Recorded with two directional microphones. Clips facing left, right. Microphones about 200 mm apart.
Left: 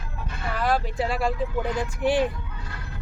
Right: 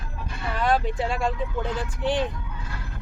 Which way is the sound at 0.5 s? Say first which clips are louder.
Right 1 dB; centre (ahead or behind).